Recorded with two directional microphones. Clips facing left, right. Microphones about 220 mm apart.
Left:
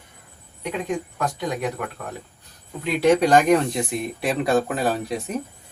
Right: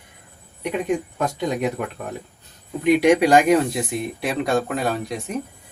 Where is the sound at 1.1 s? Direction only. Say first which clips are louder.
Right 3 dB; 25° right (ahead or behind).